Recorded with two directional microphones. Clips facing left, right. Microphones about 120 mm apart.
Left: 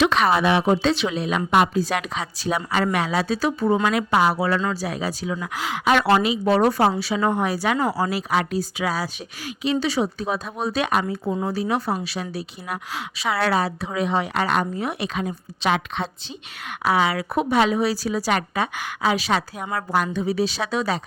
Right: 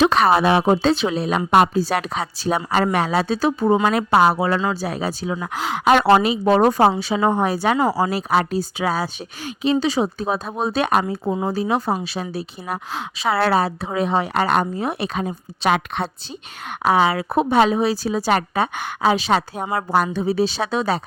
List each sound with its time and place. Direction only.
0.0 s speech: 35° right (ahead or behind)
4.3 s speech: 25° right (ahead or behind)
4.9 s speech: 35° right (ahead or behind)
6.1 s speech: 45° right (ahead or behind)
7.0 s speech: 30° right (ahead or behind)
15.6 s a woman's voice: 60° right (ahead or behind)
16.8 s speech: 30° right (ahead or behind)
18.3 s speech: 40° right (ahead or behind)